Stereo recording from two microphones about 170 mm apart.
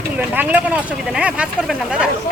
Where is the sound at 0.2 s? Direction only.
10° right (ahead or behind).